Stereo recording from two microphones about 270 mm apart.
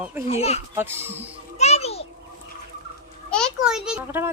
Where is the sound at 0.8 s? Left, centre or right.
Centre.